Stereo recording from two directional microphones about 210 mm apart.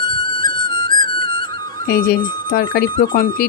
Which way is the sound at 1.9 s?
45° left (ahead or behind).